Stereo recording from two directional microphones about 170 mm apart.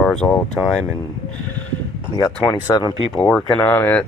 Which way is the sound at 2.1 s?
25° left (ahead or behind).